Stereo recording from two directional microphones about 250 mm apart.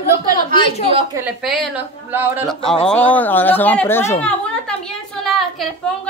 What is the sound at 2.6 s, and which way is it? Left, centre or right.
Speech, centre.